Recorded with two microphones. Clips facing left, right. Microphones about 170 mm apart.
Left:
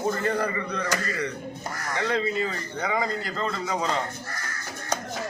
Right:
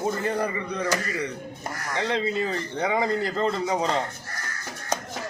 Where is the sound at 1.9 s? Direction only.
20° right (ahead or behind).